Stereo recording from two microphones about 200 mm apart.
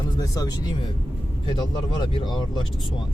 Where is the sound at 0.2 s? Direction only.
20° left (ahead or behind).